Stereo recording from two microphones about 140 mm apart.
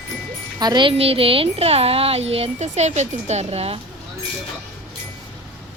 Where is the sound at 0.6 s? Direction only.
30° right (ahead or behind); by 3.7 s 45° right (ahead or behind).